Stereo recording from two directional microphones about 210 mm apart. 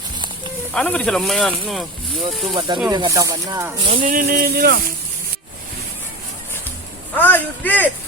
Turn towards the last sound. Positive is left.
turn(degrees=10)  # may be behind; listen again after turning